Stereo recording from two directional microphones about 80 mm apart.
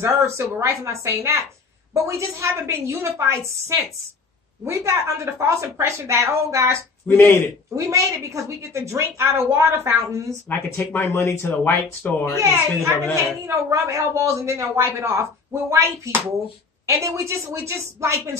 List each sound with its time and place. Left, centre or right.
0.0 s a woman's voice: right
2.0 s a woman's voice: right
7.1 s a man's voice: left
7.7 s a woman's voice: right
10.5 s speech: left
12.5 s a woman's voice: right